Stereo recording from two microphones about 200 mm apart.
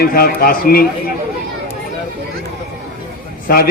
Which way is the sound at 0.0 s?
50° left (ahead or behind).